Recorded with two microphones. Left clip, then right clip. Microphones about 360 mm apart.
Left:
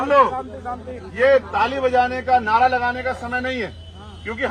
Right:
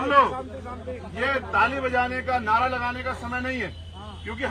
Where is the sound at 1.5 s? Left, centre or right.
Centre.